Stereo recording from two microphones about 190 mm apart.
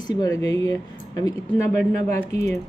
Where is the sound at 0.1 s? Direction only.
20° left (ahead or behind).